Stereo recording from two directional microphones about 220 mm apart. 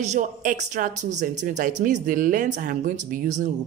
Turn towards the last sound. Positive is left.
turn(degrees=-35)  # may be behind; listen again after turning